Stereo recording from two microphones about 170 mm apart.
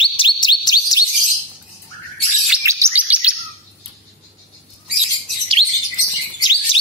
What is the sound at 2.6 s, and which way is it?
Chirp tone, 15° right (ahead or behind).